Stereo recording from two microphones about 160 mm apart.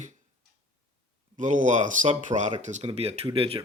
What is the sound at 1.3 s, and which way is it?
Speech, 50° right (ahead or behind).